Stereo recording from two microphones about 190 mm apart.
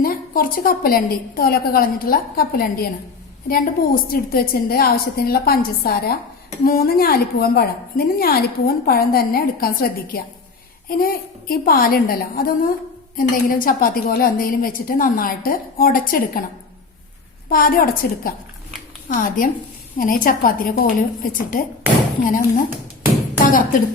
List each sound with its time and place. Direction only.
0.0 s a woman's voice: 50° left (ahead or behind)
17.5 s a woman's voice: 50° left (ahead or behind)
23.5 s a woman's voice: 45° left (ahead or behind)